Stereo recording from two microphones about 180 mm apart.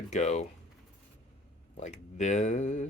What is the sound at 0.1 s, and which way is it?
Speech, 40° left (ahead or behind).